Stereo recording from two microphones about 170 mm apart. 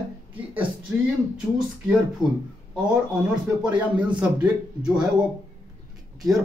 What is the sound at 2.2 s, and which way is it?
Speech, 25° right (ahead or behind).